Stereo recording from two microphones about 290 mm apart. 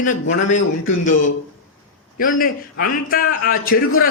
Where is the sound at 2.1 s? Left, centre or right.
Left.